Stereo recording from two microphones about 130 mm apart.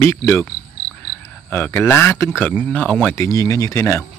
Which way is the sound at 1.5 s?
15° left (ahead or behind).